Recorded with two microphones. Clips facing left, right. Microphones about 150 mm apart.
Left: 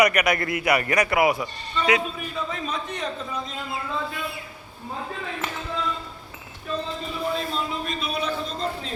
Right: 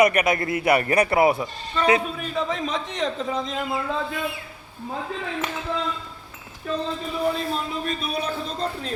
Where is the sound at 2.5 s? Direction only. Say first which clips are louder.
Right 3 dB; 90° right.